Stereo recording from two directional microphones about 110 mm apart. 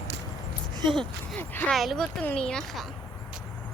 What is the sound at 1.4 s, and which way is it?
Speech, 20° left (ahead or behind).